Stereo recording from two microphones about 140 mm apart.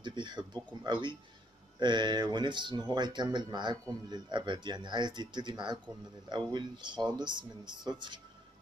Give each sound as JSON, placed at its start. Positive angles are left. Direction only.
{"t": 0.0, "sound": "speech", "side_deg": -30}